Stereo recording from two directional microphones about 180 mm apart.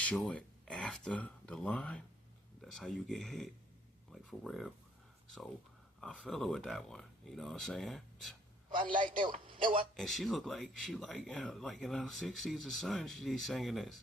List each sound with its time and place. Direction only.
0.0 s speech: 5° left (ahead or behind)
6.0 s speech: 5° left (ahead or behind)
8.9 s a man's voice: 50° right (ahead or behind)
9.9 s speech: centre (ahead or behind)